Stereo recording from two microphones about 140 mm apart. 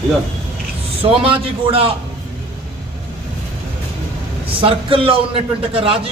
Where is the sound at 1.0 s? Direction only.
40° right (ahead or behind).